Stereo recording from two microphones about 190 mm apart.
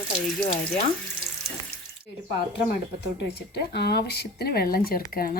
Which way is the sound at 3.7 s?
60° left (ahead or behind).